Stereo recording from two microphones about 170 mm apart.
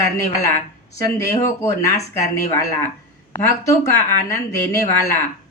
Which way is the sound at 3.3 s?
15° left (ahead or behind).